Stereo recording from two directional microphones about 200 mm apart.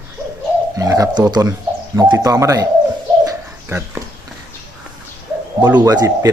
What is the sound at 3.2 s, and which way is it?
Bird, 10° right (ahead or behind).